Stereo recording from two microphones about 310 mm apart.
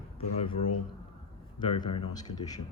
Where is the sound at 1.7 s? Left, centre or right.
Centre.